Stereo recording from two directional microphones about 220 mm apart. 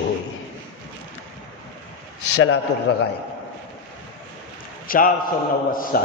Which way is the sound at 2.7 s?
55° left (ahead or behind).